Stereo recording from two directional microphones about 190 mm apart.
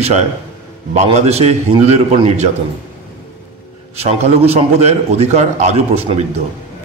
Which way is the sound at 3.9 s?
35° right (ahead or behind).